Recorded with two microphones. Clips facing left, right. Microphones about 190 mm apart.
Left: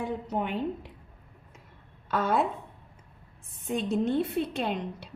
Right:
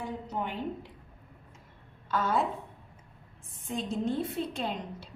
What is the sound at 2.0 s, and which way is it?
Speech, 65° left (ahead or behind).